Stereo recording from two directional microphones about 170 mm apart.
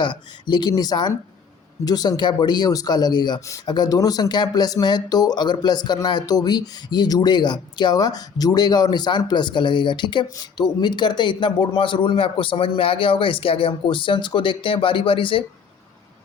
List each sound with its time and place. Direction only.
0.0 s speech: 25° left (ahead or behind)